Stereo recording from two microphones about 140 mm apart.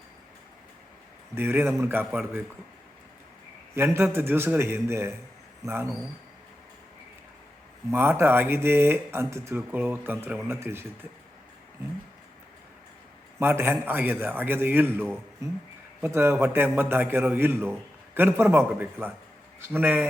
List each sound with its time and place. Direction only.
1.4 s a man's voice: 15° right (ahead or behind)
3.8 s a man's voice: 15° right (ahead or behind)
7.9 s a man's voice: 15° right (ahead or behind)
13.4 s a man's voice: 15° right (ahead or behind)